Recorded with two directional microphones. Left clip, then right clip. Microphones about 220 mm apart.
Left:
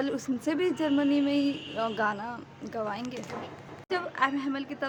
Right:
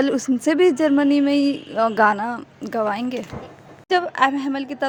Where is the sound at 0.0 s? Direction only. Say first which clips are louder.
Right 11 dB; 30° right (ahead or behind).